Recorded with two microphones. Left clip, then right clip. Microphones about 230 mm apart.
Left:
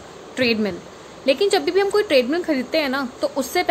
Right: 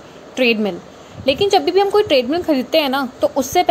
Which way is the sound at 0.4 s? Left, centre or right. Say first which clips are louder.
Right 4 dB; centre.